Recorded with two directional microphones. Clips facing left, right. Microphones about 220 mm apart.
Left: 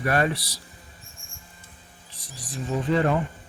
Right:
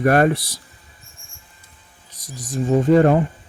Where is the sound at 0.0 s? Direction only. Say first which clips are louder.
Right 8 dB; 50° right (ahead or behind).